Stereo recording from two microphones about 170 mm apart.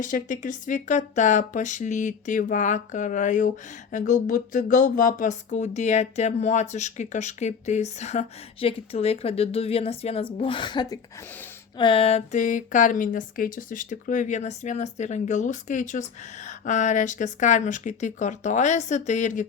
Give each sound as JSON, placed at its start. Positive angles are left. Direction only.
{"t": 0.0, "sound": "speech", "side_deg": 50}